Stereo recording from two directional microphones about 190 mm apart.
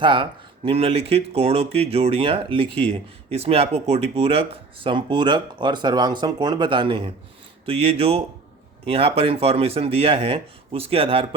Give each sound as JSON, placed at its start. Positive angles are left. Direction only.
{"t": 0.0, "sound": "speech", "side_deg": -25}